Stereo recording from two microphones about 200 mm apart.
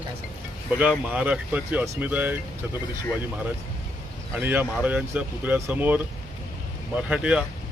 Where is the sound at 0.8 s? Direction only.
5° right (ahead or behind).